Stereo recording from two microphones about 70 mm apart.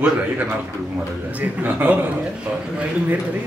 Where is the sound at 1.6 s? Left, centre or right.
Right.